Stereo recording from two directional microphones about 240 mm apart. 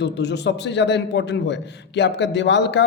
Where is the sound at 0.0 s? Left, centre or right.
Left.